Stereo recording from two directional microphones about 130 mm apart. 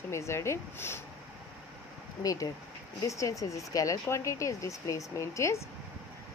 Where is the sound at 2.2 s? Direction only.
25° left (ahead or behind).